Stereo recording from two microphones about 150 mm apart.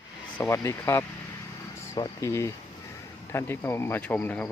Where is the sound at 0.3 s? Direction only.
20° left (ahead or behind).